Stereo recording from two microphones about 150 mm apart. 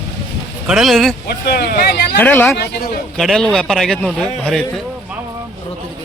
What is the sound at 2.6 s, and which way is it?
Speech, 80° left.